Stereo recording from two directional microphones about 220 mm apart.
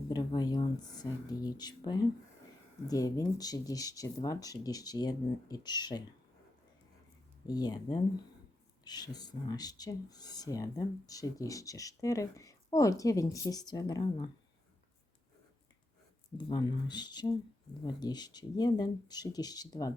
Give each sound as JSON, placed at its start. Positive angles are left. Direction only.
{"t": 0.1, "sound": "speech", "side_deg": 20}
{"t": 7.4, "sound": "speech", "side_deg": 15}
{"t": 16.4, "sound": "speech", "side_deg": 20}